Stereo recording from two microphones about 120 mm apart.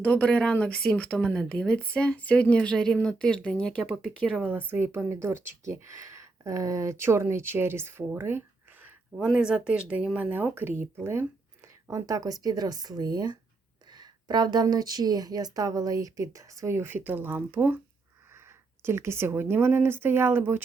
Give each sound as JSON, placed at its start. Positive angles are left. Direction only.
{"t": 0.0, "sound": "speech", "side_deg": 10}
{"t": 4.4, "sound": "speech", "side_deg": -15}
{"t": 9.1, "sound": "speech", "side_deg": -5}
{"t": 18.8, "sound": "speech", "side_deg": -20}